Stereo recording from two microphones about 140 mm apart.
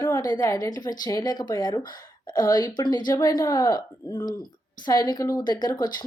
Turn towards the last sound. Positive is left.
turn(degrees=30)  # may be behind; listen again after turning